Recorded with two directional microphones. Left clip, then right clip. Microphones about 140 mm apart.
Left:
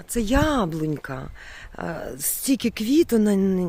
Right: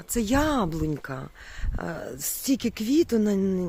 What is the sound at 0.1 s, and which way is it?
A woman's voice, 10° left (ahead or behind).